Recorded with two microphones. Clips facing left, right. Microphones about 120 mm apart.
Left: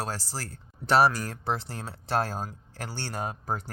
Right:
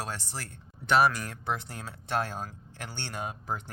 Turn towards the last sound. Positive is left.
turn(degrees=40)  # may be behind; listen again after turning